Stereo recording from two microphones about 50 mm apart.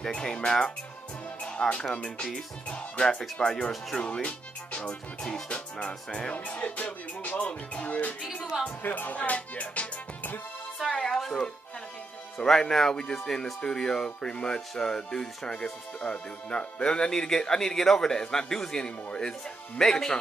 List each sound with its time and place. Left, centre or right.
0.0 s speech: centre
1.4 s music: centre
3.3 s speech: centre
6.3 s music: left
8.8 s speech: left
10.8 s music: centre
12.4 s speech: centre
16.0 s music: left
17.1 s speech: centre